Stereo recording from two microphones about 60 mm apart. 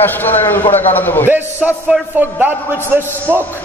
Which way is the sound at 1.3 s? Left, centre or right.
Right.